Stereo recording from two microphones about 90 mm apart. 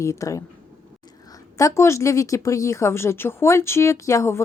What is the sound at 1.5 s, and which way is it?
Speech, 35° left (ahead or behind).